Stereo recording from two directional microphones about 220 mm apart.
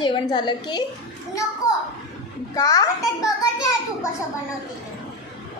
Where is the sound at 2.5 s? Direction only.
15° left (ahead or behind).